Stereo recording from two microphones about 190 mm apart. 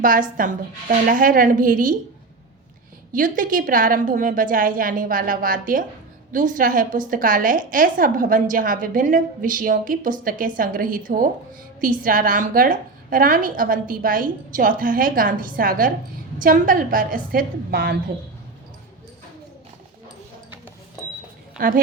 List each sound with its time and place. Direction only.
0.0 s a woman's voice: 45° right (ahead or behind)
3.1 s a woman's voice: 45° right (ahead or behind)
21.6 s a woman's voice: 45° right (ahead or behind)